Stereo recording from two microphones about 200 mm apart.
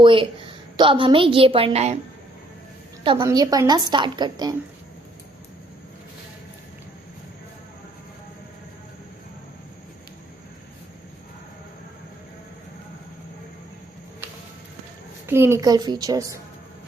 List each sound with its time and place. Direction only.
0.0 s a woman's voice: 25° right (ahead or behind)
3.0 s a woman's voice: 25° right (ahead or behind)
15.3 s a woman's voice: 15° right (ahead or behind)